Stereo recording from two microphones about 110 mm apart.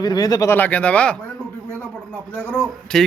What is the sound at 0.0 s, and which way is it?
Speech, 40° left (ahead or behind).